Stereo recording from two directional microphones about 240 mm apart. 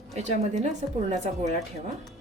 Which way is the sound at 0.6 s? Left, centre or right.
Right.